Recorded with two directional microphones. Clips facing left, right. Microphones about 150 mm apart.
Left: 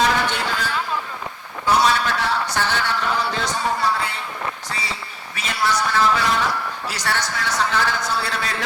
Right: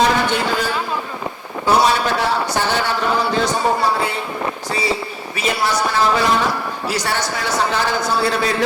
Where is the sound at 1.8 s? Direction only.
10° right (ahead or behind).